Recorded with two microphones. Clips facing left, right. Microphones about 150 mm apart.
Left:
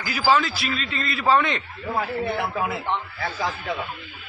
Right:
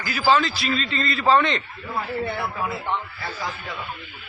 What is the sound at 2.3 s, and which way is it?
Speech, 20° left (ahead or behind).